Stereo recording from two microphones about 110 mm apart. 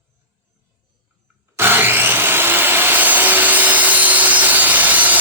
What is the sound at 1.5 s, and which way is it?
Wood, 20° right (ahead or behind).